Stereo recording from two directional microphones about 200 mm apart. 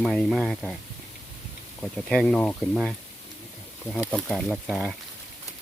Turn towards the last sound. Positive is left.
turn(degrees=0)  # may be behind; listen again after turning